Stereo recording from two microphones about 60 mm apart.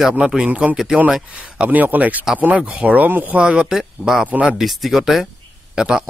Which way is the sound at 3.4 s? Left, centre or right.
Centre.